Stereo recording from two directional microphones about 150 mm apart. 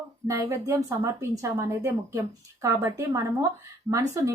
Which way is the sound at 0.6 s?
20° right (ahead or behind).